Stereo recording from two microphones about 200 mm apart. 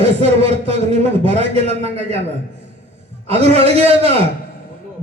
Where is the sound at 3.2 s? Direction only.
30° right (ahead or behind).